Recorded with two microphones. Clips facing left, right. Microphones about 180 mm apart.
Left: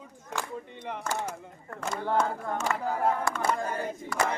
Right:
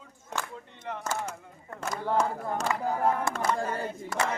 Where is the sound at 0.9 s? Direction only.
15° left (ahead or behind).